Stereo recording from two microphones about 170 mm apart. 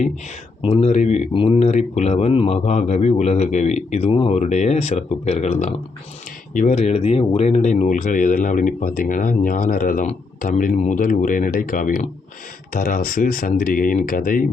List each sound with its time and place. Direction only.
0.6 s speech: 35° left (ahead or behind); by 14.4 s 55° left (ahead or behind)